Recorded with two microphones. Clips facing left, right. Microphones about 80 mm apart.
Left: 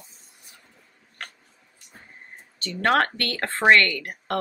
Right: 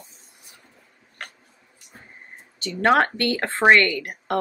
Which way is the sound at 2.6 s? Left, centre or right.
Centre.